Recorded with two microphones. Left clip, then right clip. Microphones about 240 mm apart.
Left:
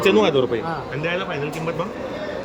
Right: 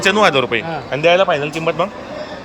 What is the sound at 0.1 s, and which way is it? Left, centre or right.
Speech, right.